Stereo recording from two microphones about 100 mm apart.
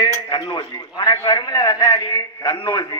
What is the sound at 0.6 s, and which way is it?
A man's voice, 40° left (ahead or behind).